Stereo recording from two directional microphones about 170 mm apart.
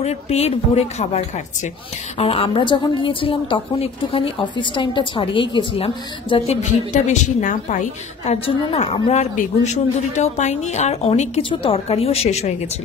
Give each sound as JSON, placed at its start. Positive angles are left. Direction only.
{"t": 0.0, "sound": "a woman's voice", "side_deg": 40}
{"t": 8.3, "sound": "a woman's voice", "side_deg": 40}